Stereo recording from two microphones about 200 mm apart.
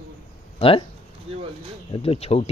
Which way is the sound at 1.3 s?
30° right (ahead or behind).